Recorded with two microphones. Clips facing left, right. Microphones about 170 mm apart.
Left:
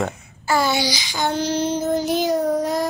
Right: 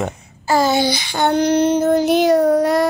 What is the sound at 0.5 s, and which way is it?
Child singing, 45° right (ahead or behind).